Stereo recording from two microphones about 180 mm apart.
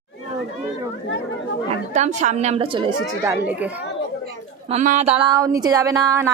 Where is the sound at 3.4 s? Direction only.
10° right (ahead or behind).